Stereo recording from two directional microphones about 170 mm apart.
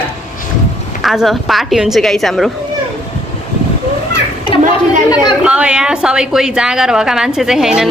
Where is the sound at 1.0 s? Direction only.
Centre (ahead or behind).